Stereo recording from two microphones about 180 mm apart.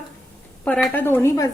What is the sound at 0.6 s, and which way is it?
Speech, 5° left (ahead or behind).